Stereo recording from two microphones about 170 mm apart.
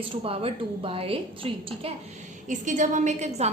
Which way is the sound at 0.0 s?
30° right (ahead or behind).